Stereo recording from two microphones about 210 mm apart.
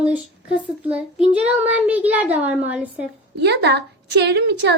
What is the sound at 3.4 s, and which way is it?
A woman's voice, 55° right (ahead or behind).